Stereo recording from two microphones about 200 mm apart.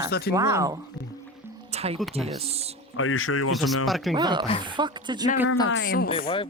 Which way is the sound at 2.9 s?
90° left.